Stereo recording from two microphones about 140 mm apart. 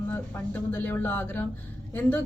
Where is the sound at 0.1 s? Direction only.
15° left (ahead or behind).